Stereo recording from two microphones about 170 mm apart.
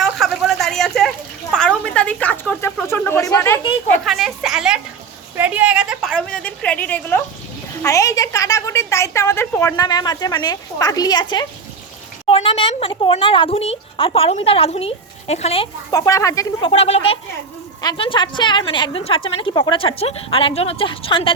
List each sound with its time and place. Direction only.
0.0 s a sound: centre (ahead or behind)
3.9 s a woman's voice: centre (ahead or behind); by 15.7 s 35° left (ahead or behind)
15.9 s a woman's voice: 20° left (ahead or behind)
16.6 s speech: 35° left (ahead or behind)